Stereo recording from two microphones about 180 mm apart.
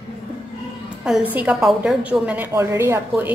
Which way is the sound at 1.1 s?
5° right (ahead or behind).